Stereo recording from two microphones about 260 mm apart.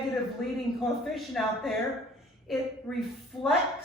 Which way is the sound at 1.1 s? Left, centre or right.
Centre.